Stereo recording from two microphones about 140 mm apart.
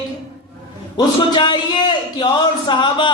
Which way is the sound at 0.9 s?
30° left (ahead or behind).